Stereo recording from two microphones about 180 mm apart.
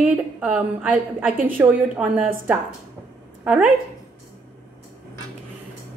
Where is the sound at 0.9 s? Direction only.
50° right (ahead or behind).